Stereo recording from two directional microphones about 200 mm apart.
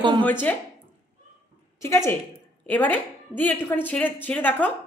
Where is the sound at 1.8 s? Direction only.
15° left (ahead or behind).